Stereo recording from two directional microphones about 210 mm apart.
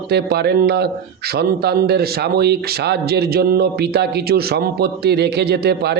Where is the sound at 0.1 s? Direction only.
50° right (ahead or behind).